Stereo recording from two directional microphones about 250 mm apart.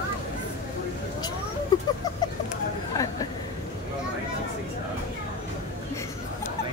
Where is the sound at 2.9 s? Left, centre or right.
Centre.